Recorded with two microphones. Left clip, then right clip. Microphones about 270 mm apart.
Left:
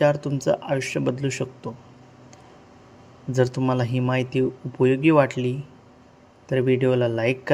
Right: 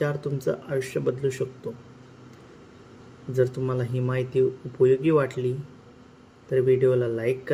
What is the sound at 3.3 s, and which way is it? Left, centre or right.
Speech, left.